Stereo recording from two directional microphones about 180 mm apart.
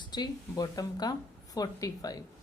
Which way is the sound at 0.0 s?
25° left (ahead or behind).